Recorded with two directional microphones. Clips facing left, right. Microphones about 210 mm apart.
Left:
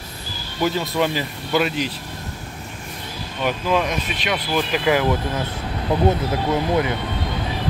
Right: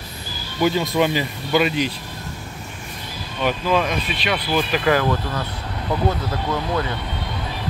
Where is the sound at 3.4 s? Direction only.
Centre (ahead or behind).